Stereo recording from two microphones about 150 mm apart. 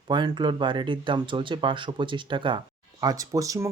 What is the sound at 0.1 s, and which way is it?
Speech, 30° right (ahead or behind).